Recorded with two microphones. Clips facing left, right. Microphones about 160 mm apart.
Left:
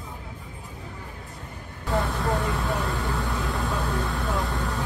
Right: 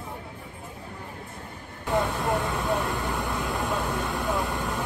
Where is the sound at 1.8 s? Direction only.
20° right (ahead or behind).